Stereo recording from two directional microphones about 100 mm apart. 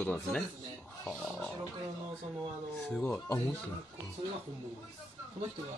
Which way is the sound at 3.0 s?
15° left (ahead or behind).